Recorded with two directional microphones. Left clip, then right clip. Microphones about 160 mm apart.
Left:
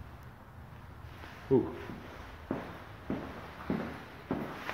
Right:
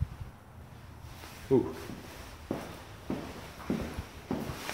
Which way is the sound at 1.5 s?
5° right (ahead or behind).